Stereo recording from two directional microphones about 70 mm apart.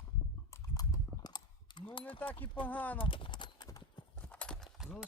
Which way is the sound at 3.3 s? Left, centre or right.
Left.